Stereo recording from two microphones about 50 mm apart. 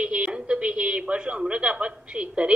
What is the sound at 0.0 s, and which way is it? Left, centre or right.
A woman's voice, right.